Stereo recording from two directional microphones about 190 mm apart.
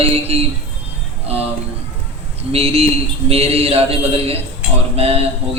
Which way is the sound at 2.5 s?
30° right (ahead or behind).